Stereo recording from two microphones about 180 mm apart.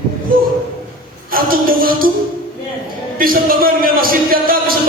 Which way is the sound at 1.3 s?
55° right (ahead or behind).